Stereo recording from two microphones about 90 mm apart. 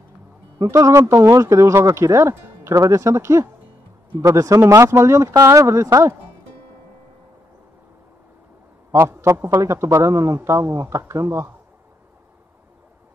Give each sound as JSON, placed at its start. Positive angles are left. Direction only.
{"t": 0.6, "sound": "speech", "side_deg": -40}
{"t": 8.9, "sound": "speech", "side_deg": -25}